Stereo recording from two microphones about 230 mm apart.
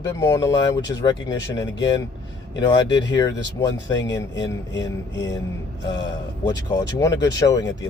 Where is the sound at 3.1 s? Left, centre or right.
Centre.